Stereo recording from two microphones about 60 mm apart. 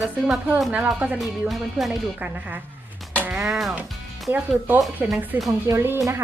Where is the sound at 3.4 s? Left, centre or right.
Centre.